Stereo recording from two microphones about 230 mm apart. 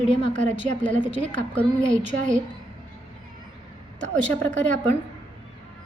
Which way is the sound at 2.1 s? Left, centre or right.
Right.